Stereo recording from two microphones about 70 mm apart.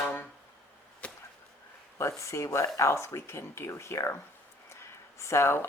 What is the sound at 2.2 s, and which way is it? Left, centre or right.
Speech, left.